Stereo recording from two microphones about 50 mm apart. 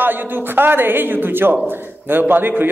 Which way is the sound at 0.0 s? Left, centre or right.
Right.